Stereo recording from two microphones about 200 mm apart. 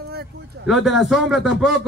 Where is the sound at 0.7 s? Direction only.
Centre (ahead or behind).